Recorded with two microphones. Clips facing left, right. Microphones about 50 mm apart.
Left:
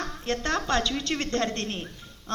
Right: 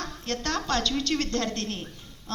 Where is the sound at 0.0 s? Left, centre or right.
Left.